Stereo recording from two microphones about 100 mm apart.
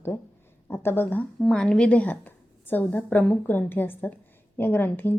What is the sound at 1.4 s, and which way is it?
A woman's voice, 10° left (ahead or behind).